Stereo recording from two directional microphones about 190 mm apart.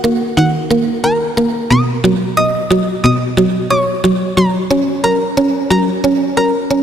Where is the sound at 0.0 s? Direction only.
Centre (ahead or behind).